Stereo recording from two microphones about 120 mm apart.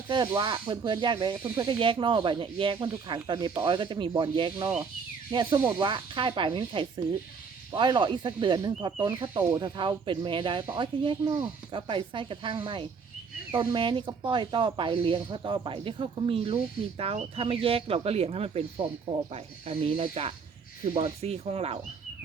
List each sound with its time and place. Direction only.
0.3 s speech: 40° right (ahead or behind)
11.2 s speech: 30° right (ahead or behind)
11.7 s speech: 45° right (ahead or behind)